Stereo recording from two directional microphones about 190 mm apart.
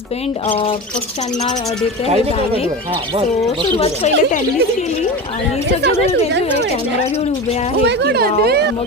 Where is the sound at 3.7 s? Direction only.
30° left (ahead or behind).